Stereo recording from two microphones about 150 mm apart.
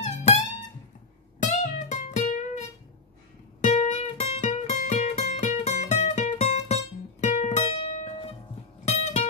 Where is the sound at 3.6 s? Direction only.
50° left (ahead or behind).